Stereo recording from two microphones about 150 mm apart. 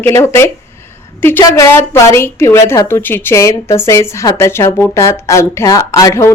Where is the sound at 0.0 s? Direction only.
15° left (ahead or behind).